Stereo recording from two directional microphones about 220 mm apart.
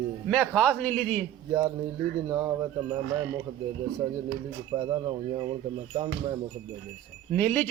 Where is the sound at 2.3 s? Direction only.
15° right (ahead or behind).